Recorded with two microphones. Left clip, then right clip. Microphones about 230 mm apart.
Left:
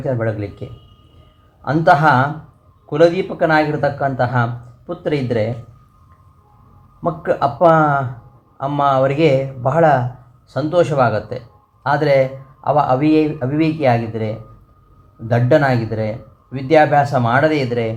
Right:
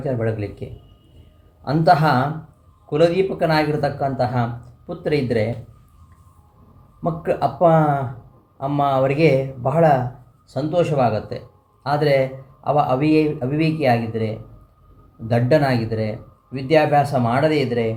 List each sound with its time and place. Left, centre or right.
0.0 s speech: right
1.6 s speech: right
7.0 s speech: right